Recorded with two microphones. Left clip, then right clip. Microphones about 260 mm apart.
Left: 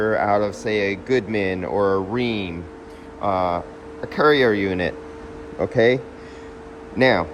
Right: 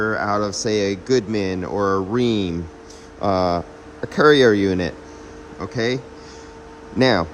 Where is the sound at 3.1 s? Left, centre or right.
Centre.